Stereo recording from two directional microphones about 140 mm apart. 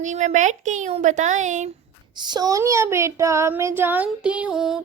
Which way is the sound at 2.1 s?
30° right (ahead or behind).